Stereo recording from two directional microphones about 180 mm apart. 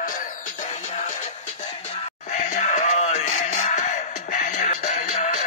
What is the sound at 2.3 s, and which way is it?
Music, 40° left (ahead or behind).